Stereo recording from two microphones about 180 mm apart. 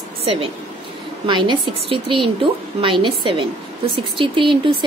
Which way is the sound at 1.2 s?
25° right (ahead or behind).